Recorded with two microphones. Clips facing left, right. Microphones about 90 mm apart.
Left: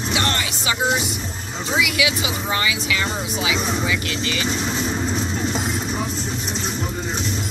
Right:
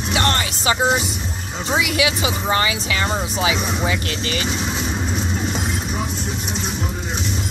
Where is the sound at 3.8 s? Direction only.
40° right (ahead or behind).